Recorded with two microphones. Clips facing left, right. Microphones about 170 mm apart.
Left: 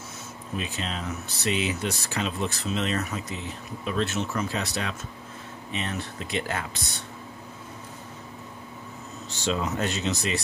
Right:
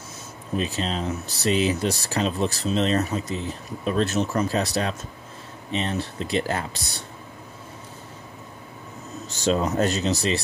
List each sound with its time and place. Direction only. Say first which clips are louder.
0.6 s speech: right 6 dB; 35° right (ahead or behind)
9.3 s speech: right 5 dB; 40° right (ahead or behind)